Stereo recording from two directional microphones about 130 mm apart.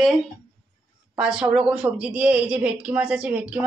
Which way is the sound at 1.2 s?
5° right (ahead or behind).